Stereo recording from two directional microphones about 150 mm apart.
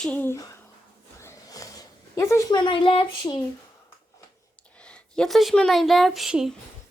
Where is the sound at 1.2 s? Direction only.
20° left (ahead or behind).